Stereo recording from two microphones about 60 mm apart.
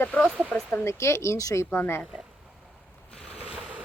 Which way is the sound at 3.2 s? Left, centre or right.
Centre.